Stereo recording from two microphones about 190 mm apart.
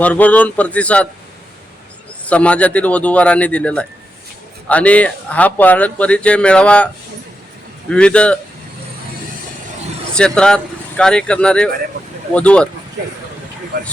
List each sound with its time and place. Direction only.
0.0 s speech: 5° left (ahead or behind)
2.2 s speech: 5° left (ahead or behind)
10.2 s speech: 5° left (ahead or behind)